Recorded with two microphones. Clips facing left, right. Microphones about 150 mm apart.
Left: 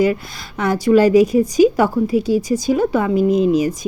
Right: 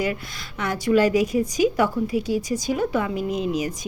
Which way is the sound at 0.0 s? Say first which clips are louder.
Left 9 dB; 35° left (ahead or behind).